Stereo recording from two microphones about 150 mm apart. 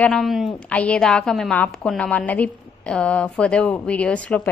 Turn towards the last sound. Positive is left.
turn(degrees=10)  # may be behind; listen again after turning